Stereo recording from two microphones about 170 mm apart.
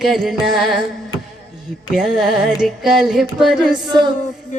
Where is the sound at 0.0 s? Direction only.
Centre (ahead or behind).